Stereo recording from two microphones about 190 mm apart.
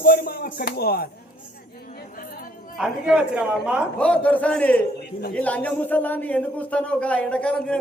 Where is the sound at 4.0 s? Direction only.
5° left (ahead or behind).